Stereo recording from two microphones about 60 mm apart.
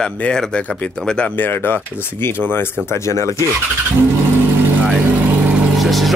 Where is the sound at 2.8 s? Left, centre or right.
Left.